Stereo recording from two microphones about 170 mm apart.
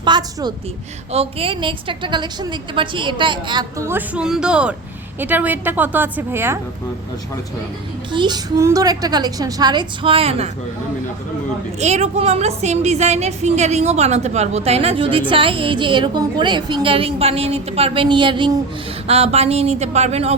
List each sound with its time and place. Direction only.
0.0 s a sound: 25° right (ahead or behind)
1.1 s a woman's voice: 35° right (ahead or behind); by 6.6 s 15° right (ahead or behind)
8.1 s a woman's voice: 30° right (ahead or behind)
11.8 s a woman's voice: 40° right (ahead or behind)